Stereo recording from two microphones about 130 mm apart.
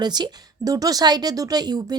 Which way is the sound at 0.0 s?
35° right (ahead or behind).